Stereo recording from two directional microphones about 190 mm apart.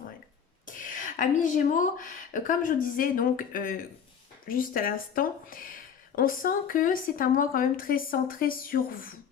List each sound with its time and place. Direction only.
0.6 s speech: 45° left (ahead or behind)